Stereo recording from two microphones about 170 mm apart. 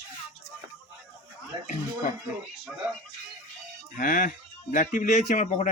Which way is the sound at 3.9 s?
50° left (ahead or behind).